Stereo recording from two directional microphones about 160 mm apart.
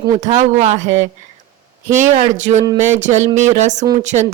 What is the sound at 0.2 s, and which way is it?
Speech, 45° right (ahead or behind).